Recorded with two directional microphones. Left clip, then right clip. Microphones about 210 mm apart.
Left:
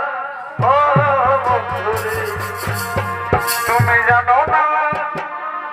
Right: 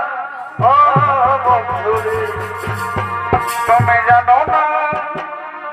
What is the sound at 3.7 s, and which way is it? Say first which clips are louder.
Music: right 3 dB; 10° right (ahead or behind).